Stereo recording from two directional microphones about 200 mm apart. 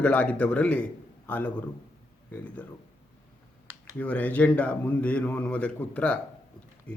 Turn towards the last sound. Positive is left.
turn(degrees=5)  # may be behind; listen again after turning